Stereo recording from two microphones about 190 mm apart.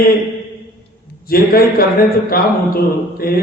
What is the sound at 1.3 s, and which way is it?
A man's voice, 50° left (ahead or behind).